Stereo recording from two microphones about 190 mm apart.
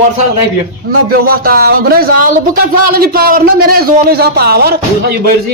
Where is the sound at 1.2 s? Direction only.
50° right (ahead or behind).